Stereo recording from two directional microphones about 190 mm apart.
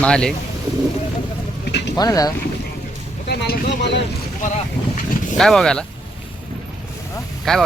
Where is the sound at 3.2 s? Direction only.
55° left (ahead or behind).